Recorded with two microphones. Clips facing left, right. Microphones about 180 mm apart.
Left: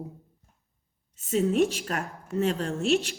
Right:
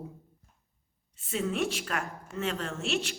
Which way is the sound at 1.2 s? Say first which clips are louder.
Left 7 dB; 40° left (ahead or behind).